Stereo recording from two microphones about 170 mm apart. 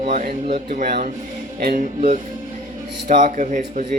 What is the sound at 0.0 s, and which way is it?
Speech, 50° right (ahead or behind).